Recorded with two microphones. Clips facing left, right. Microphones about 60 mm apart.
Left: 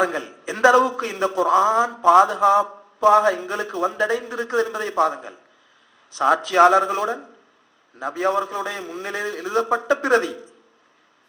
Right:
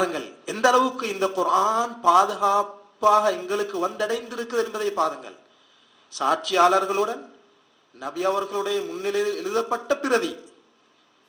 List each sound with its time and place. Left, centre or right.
0.0 s a man's voice: left